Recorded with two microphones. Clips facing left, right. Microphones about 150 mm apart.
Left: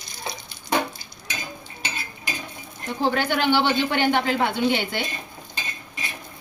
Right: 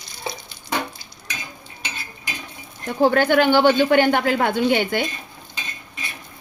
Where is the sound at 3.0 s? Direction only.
50° right (ahead or behind).